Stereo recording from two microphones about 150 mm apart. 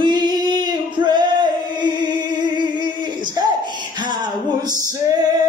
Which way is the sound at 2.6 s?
30° right (ahead or behind).